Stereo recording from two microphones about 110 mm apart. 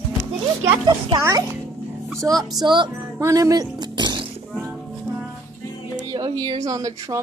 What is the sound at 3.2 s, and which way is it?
Speech, 30° right (ahead or behind).